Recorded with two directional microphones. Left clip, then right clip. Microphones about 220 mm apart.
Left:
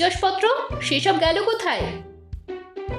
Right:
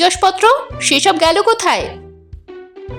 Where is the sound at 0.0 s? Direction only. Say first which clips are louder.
Right 8 dB; 35° right (ahead or behind).